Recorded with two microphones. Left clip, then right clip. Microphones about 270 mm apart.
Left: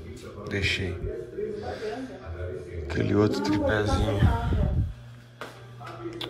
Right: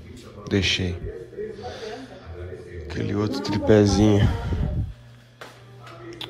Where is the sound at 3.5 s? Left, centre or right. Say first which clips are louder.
Right 12 dB; right.